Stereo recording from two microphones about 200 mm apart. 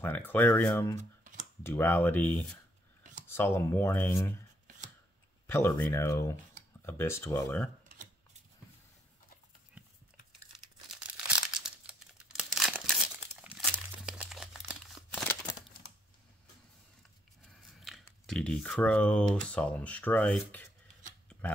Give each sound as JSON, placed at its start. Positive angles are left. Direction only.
{"t": 0.0, "sound": "speech", "side_deg": 10}
{"t": 0.9, "sound": "a sound", "side_deg": -40}
{"t": 1.6, "sound": "speech", "side_deg": 10}
{"t": 4.6, "sound": "scissors", "side_deg": -40}
{"t": 5.5, "sound": "speech", "side_deg": 10}
{"t": 11.2, "sound": "crumpling", "side_deg": -5}
{"t": 17.6, "sound": "a sound", "side_deg": 0}
{"t": 18.2, "sound": "speech", "side_deg": 5}